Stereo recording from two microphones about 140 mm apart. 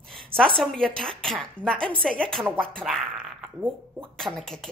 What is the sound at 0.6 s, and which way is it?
A woman's voice, 5° left (ahead or behind).